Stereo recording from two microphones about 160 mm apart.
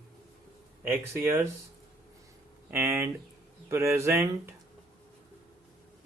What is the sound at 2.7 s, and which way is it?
Speech, 15° right (ahead or behind).